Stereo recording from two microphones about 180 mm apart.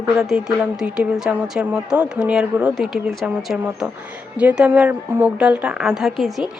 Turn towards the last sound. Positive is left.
turn(degrees=0)  # may be behind; listen again after turning